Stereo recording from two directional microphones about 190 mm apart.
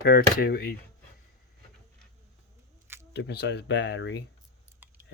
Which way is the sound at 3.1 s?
60° left (ahead or behind).